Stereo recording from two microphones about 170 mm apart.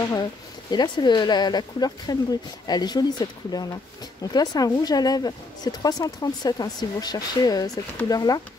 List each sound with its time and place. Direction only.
0.1 s speech: 25° left (ahead or behind)